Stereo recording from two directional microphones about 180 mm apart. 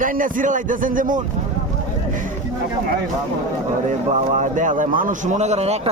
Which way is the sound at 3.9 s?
45° right (ahead or behind).